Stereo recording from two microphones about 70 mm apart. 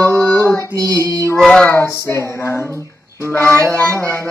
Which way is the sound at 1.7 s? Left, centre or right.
Left.